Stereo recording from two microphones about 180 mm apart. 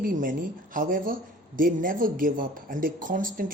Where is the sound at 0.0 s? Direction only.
50° right (ahead or behind).